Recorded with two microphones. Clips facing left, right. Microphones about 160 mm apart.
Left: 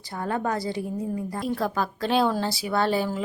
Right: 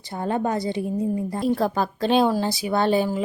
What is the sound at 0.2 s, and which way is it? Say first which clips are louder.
Speech: right 3 dB; 25° right (ahead or behind).